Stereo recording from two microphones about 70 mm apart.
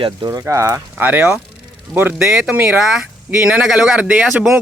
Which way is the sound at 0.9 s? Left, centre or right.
Right.